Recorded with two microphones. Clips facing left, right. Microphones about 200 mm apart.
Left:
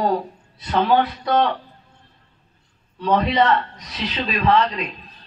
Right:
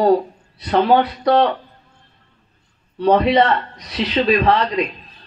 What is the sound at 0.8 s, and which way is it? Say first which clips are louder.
Speech: right 3 dB; 45° right (ahead or behind).